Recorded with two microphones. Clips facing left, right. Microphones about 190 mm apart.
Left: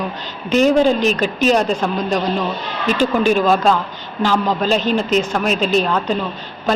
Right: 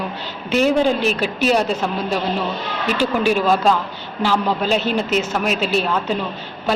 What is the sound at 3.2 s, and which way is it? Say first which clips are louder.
A woman's voice: left 1 dB; 10° right (ahead or behind).